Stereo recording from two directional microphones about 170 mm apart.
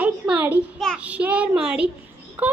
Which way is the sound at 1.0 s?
10° right (ahead or behind).